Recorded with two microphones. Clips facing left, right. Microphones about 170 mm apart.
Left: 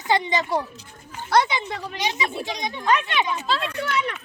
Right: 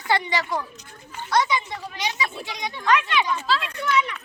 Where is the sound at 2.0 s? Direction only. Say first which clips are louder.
Left 3 dB; 25° left (ahead or behind).